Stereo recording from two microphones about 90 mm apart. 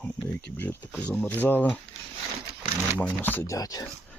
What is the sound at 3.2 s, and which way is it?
Speech, 20° left (ahead or behind).